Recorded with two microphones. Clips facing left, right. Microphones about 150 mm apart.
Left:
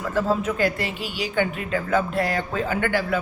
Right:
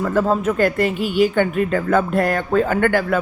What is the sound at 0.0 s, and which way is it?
Speech, 50° right (ahead or behind).